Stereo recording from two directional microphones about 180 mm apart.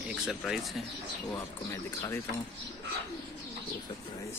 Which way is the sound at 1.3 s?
15° left (ahead or behind).